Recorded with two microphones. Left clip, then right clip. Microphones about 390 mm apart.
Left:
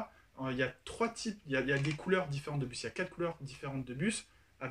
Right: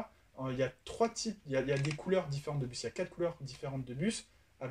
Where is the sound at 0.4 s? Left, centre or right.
Centre.